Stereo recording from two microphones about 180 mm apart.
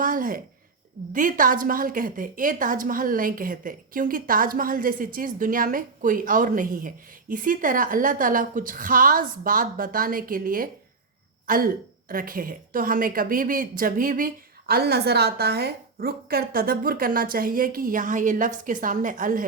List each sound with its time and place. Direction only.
0.0 s a woman's voice: 50° right (ahead or behind)